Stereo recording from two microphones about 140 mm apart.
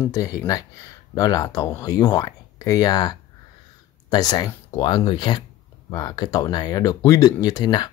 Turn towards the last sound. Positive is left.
turn(degrees=30)  # may be behind; listen again after turning